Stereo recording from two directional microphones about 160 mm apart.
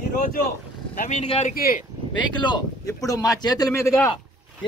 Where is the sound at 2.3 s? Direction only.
30° left (ahead or behind).